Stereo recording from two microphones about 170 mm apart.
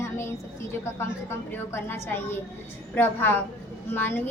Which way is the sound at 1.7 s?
15° left (ahead or behind).